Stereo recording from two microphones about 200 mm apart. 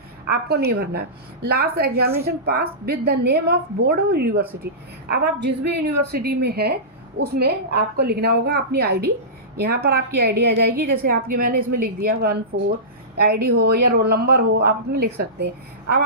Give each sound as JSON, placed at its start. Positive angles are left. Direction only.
{"t": 0.4, "sound": "a woman's voice", "side_deg": -55}